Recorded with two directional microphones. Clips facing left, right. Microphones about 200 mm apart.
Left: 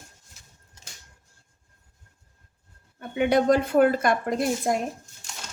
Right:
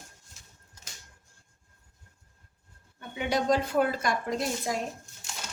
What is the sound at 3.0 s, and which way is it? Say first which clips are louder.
Speech: left 8 dB; 55° left (ahead or behind).